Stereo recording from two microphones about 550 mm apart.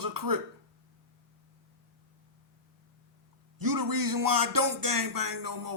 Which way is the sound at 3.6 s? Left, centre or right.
Right.